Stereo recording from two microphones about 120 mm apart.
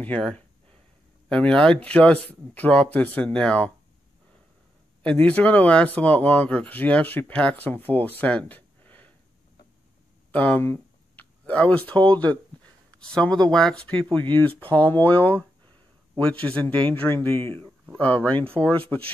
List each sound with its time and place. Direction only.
0.0 s speech: 10° left (ahead or behind)
5.0 s speech: 10° left (ahead or behind)
10.3 s a sound: 10° left (ahead or behind)
11.9 s speech: 40° right (ahead or behind)
12.9 s speech: 10° left (ahead or behind)